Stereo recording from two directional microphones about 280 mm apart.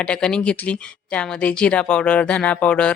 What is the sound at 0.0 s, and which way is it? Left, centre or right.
Speech, centre.